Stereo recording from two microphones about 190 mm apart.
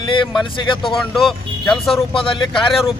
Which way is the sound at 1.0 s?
Centre (ahead or behind).